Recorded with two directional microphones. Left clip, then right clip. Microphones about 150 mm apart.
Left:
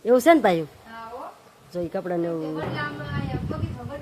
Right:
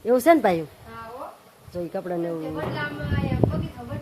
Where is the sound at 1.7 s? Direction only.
10° left (ahead or behind).